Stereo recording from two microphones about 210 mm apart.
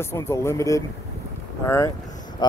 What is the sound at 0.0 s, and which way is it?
Speech, 10° left (ahead or behind).